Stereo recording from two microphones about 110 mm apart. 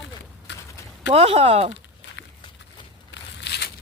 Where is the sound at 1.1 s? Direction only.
65° right (ahead or behind).